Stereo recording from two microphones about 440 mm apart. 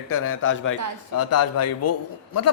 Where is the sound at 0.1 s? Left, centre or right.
Left.